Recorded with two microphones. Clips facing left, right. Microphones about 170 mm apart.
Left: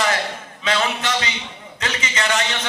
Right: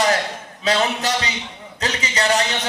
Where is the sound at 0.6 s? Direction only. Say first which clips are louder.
Right 2 dB; 35° right (ahead or behind).